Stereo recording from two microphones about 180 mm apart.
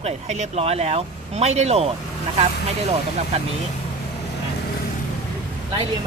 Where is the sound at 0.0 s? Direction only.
35° right (ahead or behind).